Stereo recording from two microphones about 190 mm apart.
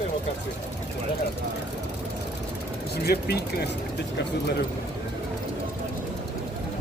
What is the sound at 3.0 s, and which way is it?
Speech, 60° left (ahead or behind).